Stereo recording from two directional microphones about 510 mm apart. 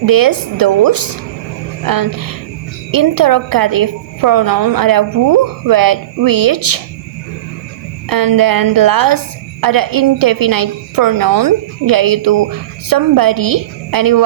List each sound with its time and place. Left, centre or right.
0.0 s a woman's voice: right
8.1 s a woman's voice: right